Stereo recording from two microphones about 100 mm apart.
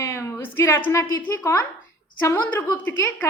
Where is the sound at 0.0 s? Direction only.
30° left (ahead or behind).